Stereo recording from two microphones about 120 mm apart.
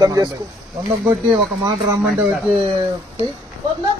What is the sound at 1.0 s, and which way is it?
Speech, 20° right (ahead or behind).